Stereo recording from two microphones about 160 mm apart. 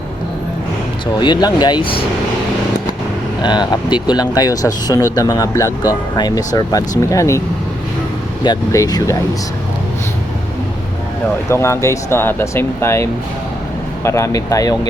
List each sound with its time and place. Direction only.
1.1 s speech: 25° left (ahead or behind)
3.4 s speech: 25° left (ahead or behind)
8.4 s speech: 20° left (ahead or behind)
11.4 s speech: 15° left (ahead or behind)